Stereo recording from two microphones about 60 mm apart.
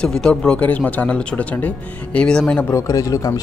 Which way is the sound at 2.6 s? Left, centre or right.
Left.